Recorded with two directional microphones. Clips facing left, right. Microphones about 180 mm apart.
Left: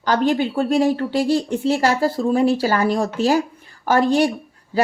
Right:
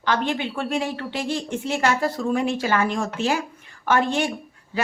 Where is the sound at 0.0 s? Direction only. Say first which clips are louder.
Left 6 dB; 40° left (ahead or behind).